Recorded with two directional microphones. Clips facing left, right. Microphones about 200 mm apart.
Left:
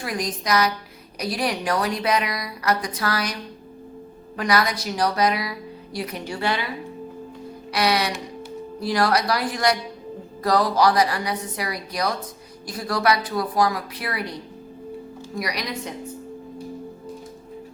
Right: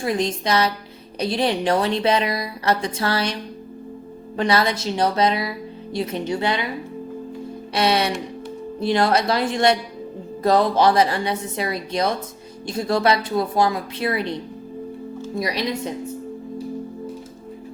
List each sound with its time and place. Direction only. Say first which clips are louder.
0.0 s a woman's voice: right 5 dB; 25° right (ahead or behind)
4.4 s a woman's voice: right 2 dB; 25° right (ahead or behind)
7.7 s a woman's voice: right 2 dB; 25° right (ahead or behind)
15.4 s a woman's voice: right 4 dB; 25° right (ahead or behind)